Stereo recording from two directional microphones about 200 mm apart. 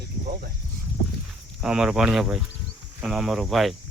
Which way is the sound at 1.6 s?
5° right (ahead or behind).